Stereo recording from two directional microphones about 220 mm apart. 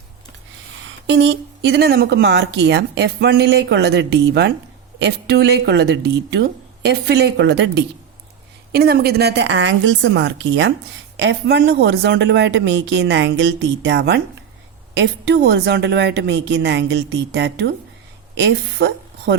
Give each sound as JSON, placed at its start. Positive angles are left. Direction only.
{"t": 1.0, "sound": "speech", "side_deg": -55}